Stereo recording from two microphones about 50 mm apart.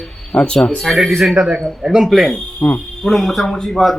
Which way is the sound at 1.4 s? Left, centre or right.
Centre.